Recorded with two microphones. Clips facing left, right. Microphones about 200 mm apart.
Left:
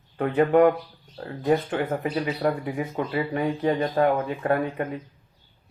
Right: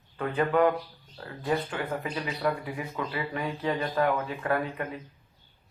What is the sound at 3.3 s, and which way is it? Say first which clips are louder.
Speech: left 7 dB; 50° left (ahead or behind).